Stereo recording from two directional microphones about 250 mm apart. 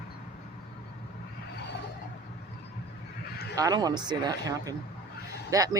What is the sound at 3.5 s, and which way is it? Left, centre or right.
Speech, centre.